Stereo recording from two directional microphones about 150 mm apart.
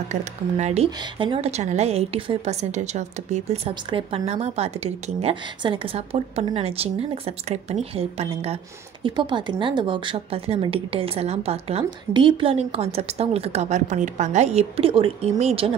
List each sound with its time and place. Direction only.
0.1 s a woman's voice: 50° right (ahead or behind)
0.8 s a woman's voice: 30° right (ahead or behind)
5.3 s a woman's voice: 35° right (ahead or behind)
9.0 s a woman's voice: 30° right (ahead or behind)